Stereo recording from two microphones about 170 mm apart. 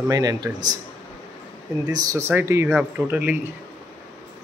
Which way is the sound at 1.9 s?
20° right (ahead or behind).